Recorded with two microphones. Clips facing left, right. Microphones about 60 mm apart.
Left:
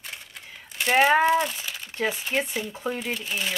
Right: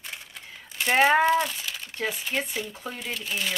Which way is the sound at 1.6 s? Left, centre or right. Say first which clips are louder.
Left 3 dB; left.